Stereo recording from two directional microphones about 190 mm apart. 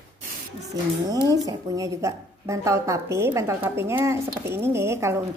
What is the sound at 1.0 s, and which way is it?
A woman's voice, 20° right (ahead or behind).